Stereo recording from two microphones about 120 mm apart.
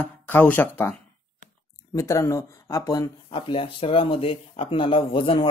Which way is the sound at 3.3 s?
50° left (ahead or behind).